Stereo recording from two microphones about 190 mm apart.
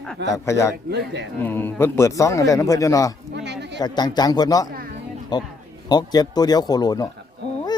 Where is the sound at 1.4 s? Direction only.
10° left (ahead or behind).